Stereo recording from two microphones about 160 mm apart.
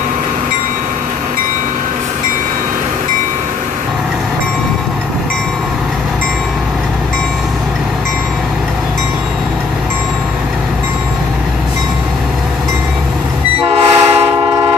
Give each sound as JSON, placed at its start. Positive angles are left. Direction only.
{"t": 13.7, "sound": "train", "side_deg": -15}